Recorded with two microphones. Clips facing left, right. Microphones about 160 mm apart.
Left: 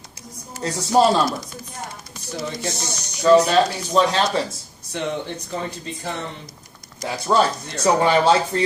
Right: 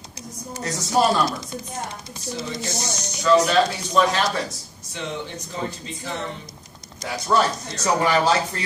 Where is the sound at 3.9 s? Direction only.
30° left (ahead or behind).